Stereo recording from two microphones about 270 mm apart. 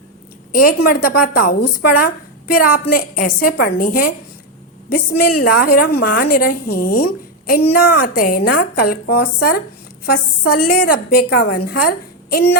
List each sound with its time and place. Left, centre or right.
0.6 s speech: left